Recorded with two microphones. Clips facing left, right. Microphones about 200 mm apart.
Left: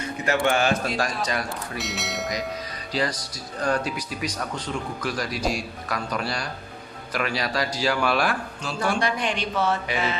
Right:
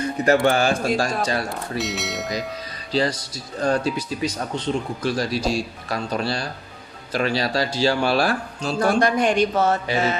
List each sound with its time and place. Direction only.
0.4 s speech: 35° right (ahead or behind)
1.8 s speech: centre (ahead or behind)
2.9 s speech: 30° right (ahead or behind)